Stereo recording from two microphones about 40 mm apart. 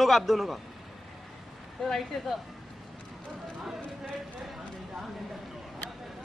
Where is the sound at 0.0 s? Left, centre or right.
Centre.